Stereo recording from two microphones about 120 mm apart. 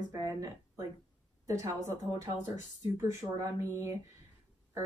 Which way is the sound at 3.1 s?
25° right (ahead or behind).